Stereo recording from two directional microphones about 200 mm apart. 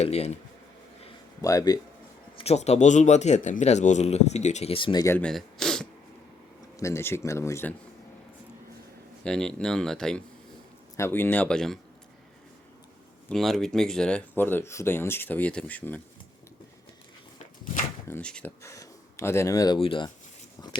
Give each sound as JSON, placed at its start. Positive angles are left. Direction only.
{"t": 0.0, "sound": "speech", "side_deg": 30}
{"t": 1.4, "sound": "speech", "side_deg": 15}
{"t": 2.3, "sound": "speech", "side_deg": 30}
{"t": 6.7, "sound": "speech", "side_deg": 15}
{"t": 9.2, "sound": "speech", "side_deg": 5}
{"t": 13.2, "sound": "speech", "side_deg": 0}
{"t": 18.1, "sound": "speech", "side_deg": 5}